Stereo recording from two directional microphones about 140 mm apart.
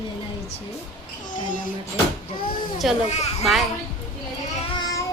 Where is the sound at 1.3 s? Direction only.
70° left (ahead or behind).